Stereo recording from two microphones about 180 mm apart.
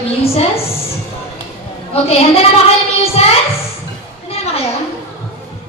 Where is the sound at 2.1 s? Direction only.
35° left (ahead or behind).